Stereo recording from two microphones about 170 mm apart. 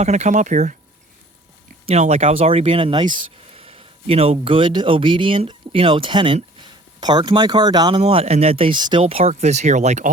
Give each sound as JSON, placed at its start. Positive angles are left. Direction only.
{"t": 0.0, "sound": "speech", "side_deg": -45}
{"t": 1.9, "sound": "speech", "side_deg": -40}